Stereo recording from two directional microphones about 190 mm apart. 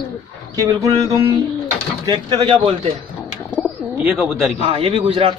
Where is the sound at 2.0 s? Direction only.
20° right (ahead or behind).